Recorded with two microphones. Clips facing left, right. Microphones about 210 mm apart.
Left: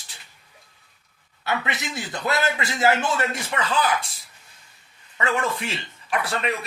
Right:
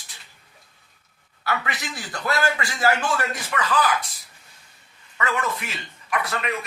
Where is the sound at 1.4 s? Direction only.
25° left (ahead or behind).